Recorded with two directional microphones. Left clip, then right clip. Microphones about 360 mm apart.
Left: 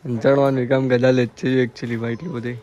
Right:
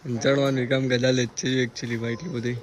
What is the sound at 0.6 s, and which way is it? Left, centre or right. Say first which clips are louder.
Speech: left 5 dB; left.